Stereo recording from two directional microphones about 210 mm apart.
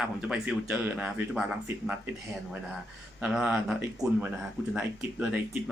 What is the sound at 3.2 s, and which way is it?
Speech, 5° right (ahead or behind).